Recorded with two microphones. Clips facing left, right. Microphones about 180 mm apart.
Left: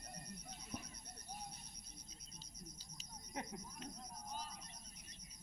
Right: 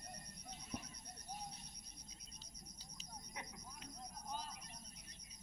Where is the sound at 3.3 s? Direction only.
50° left (ahead or behind).